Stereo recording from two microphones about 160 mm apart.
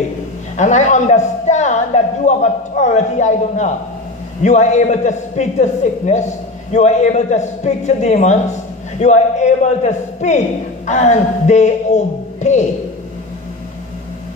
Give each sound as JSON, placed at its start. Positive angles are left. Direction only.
{"t": 0.6, "sound": "a man's voice", "side_deg": 50}